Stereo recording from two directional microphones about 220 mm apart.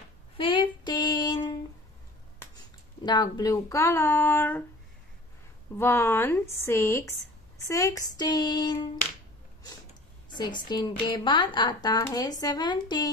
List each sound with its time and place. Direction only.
0.4 s female singing: 20° left (ahead or behind)
3.1 s a woman's voice: 20° left (ahead or behind)
5.8 s a woman's voice: 10° left (ahead or behind)
10.3 s speech: 20° left (ahead or behind)